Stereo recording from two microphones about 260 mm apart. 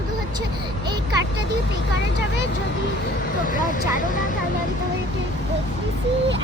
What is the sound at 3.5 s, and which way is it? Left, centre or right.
Speech, left.